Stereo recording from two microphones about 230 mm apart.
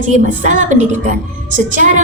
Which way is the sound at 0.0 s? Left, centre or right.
Right.